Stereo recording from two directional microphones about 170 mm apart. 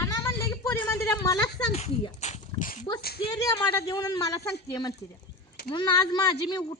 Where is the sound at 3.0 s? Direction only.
65° left (ahead or behind).